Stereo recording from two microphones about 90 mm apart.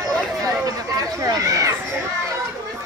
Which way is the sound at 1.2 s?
35° right (ahead or behind).